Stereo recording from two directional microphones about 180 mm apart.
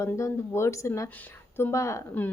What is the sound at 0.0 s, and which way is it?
A woman's voice, 15° left (ahead or behind).